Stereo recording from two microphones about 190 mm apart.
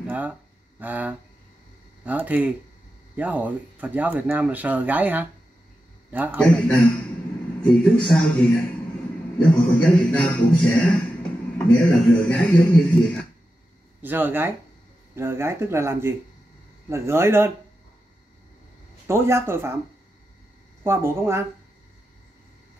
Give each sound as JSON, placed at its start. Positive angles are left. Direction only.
{"t": 0.0, "sound": "a man's voice", "side_deg": -10}
{"t": 6.4, "sound": "speech", "side_deg": 5}
{"t": 14.0, "sound": "speech", "side_deg": -10}
{"t": 19.0, "sound": "speech", "side_deg": -15}
{"t": 20.8, "sound": "speech", "side_deg": -15}